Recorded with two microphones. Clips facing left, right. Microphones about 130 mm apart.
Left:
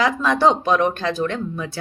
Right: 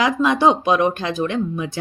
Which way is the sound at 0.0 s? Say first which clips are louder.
Right 1 dB; 15° right (ahead or behind).